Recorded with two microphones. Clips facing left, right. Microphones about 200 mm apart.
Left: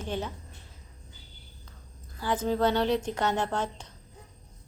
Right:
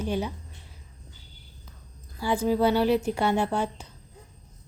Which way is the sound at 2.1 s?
10° right (ahead or behind).